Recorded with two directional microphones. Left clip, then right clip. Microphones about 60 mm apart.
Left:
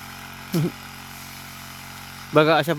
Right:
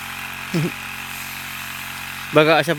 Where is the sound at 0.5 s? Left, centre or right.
Left.